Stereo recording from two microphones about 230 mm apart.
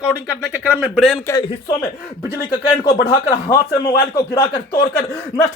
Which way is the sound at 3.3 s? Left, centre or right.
Centre.